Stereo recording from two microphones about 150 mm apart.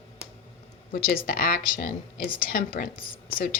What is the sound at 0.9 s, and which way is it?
Speech, 80° left.